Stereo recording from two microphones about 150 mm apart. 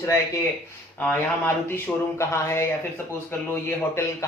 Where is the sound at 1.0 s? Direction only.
10° left (ahead or behind).